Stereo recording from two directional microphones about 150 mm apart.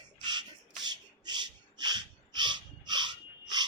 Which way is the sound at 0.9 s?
30° right (ahead or behind).